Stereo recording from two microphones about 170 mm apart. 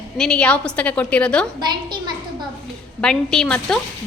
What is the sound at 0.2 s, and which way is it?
A woman's voice, 5° left (ahead or behind).